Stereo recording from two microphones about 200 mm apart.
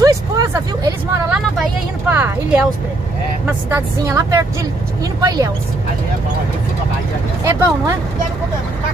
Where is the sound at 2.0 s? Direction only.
10° right (ahead or behind).